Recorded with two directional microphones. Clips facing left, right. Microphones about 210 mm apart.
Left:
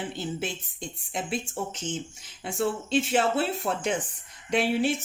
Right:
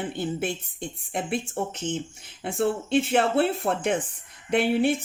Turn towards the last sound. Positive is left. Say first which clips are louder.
# right 3 dB
turn(degrees=-55)  # may be behind; listen again after turning